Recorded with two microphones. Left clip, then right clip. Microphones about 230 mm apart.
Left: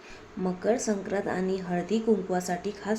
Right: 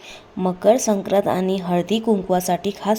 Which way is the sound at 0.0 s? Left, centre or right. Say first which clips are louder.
Right 9 dB; right.